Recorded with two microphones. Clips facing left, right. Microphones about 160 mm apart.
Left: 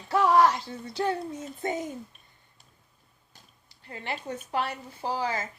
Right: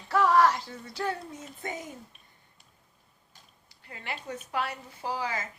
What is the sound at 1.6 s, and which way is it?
Speech, 25° left (ahead or behind).